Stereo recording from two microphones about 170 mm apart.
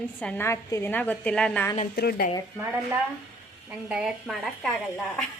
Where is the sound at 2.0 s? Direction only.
65° left (ahead or behind).